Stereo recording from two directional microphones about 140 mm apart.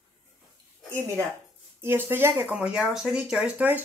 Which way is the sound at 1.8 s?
15° right (ahead or behind).